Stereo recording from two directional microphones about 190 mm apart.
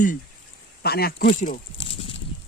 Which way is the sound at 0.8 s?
55° left (ahead or behind).